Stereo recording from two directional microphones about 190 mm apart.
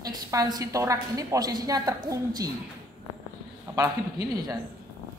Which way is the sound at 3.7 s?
15° right (ahead or behind).